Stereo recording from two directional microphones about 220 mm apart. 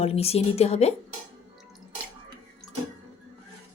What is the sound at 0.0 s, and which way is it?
Speech, 25° left (ahead or behind).